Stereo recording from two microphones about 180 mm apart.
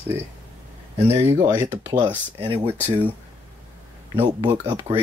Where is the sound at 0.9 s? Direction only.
15° right (ahead or behind).